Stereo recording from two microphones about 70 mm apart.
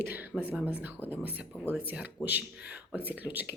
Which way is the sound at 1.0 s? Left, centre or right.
Left.